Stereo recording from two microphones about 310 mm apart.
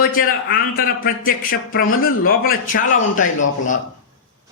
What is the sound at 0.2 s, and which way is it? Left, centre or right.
Speech, left.